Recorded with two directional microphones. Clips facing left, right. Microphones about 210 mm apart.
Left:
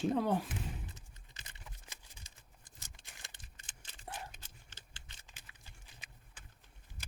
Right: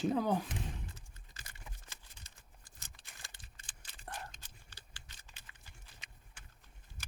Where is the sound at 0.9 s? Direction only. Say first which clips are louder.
Even; 20° left (ahead or behind).